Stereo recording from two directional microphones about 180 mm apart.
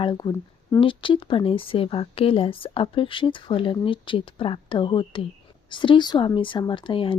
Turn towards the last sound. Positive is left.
turn(degrees=30)  # may be behind; listen again after turning